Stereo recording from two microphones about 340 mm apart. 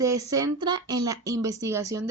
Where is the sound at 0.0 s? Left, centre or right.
Centre.